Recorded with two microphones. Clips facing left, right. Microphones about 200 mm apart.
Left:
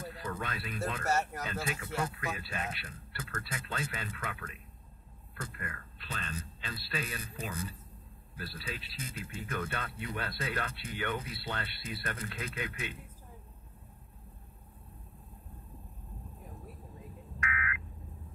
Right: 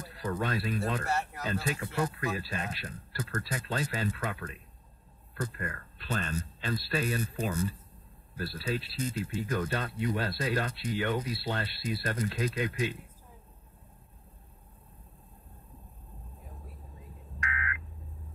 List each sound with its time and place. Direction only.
0.3 s speech: 35° right (ahead or behind)
17.5 s buzzer: 30° right (ahead or behind)